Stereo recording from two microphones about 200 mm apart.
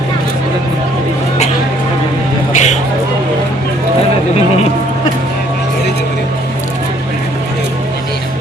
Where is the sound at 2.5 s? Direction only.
35° left (ahead or behind).